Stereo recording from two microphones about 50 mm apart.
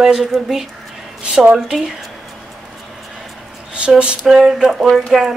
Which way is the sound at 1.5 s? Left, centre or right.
Centre.